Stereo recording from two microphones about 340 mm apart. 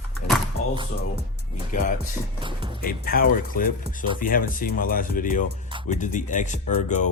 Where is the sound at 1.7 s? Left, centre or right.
Left.